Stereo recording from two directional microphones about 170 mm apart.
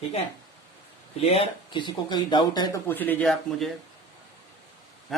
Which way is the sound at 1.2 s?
35° left (ahead or behind).